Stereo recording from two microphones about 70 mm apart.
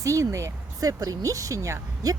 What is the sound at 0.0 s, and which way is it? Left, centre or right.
Speech, right.